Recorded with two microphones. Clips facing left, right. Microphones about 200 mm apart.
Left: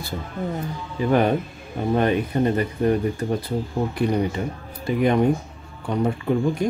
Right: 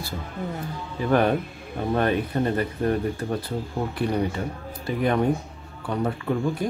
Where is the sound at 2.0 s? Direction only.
15° left (ahead or behind).